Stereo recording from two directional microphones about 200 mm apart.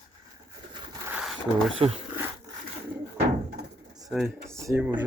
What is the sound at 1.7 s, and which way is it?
Speech, 30° right (ahead or behind).